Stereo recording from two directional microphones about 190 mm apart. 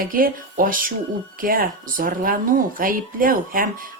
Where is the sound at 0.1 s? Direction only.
45° right (ahead or behind).